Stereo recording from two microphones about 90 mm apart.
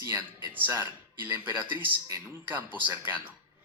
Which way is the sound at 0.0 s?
25° right (ahead or behind).